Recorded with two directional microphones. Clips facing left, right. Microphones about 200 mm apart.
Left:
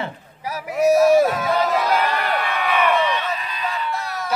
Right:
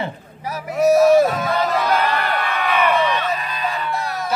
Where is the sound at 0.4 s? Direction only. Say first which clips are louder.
Right 1 dB; 10° left (ahead or behind).